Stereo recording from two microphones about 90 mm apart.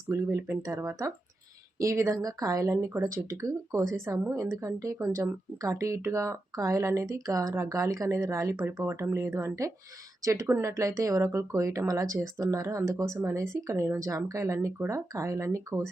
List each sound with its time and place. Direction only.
0.1 s speech: 35° right (ahead or behind)